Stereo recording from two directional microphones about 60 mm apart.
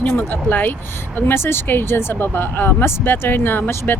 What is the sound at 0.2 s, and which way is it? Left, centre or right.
Speech, left.